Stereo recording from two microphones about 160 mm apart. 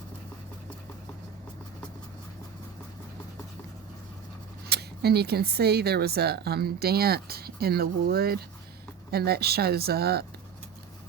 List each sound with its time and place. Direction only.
4.7 s speech: 90° right